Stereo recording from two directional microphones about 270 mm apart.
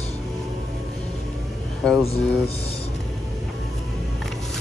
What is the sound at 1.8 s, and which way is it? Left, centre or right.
Speech, centre.